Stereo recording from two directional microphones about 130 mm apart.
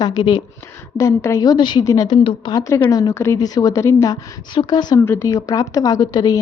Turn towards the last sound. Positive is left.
turn(degrees=30)  # may be behind; listen again after turning